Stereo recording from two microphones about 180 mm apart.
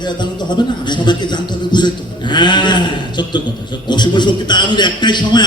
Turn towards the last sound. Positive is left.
turn(degrees=25)  # may be behind; listen again after turning